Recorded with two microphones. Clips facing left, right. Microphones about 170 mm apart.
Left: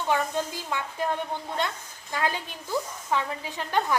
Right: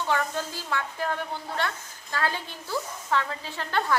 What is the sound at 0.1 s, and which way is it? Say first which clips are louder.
A woman's voice: left 3 dB; 15° left (ahead or behind).